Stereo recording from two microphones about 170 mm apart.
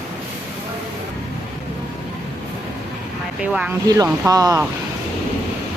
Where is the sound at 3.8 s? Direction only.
20° right (ahead or behind).